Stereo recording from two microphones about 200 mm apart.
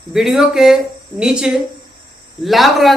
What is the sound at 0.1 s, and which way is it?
A woman's voice, centre (ahead or behind).